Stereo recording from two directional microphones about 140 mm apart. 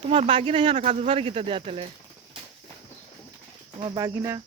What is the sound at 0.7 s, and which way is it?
Speech, 55° right (ahead or behind).